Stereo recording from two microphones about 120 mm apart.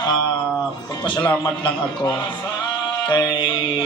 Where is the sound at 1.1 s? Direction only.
10° left (ahead or behind).